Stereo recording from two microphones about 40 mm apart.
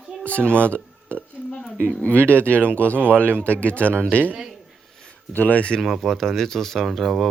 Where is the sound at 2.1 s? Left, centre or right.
Right.